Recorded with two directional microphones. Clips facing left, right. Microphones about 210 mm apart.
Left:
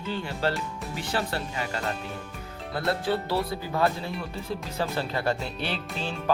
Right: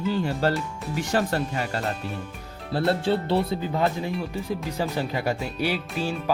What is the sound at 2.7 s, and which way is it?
Speech, 30° right (ahead or behind).